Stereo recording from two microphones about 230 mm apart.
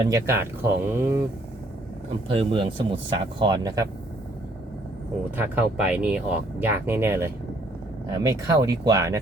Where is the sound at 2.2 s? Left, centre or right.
Right.